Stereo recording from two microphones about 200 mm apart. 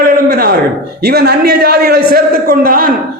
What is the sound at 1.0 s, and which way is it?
A man's voice, 55° right (ahead or behind).